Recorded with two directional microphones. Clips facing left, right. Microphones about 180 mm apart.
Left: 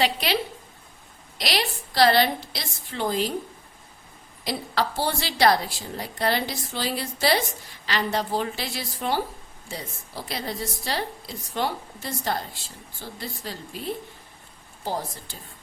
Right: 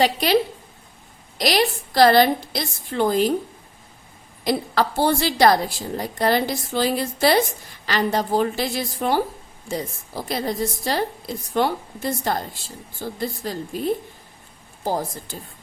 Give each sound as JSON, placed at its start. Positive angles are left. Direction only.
{"t": 0.0, "sound": "a woman's voice", "side_deg": -45}
{"t": 1.4, "sound": "a woman's voice", "side_deg": -45}
{"t": 4.4, "sound": "a woman's voice", "side_deg": -50}